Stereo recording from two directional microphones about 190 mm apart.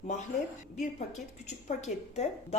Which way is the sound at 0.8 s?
40° left (ahead or behind).